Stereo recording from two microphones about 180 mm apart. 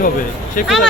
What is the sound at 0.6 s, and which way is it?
Speech, 5° right (ahead or behind).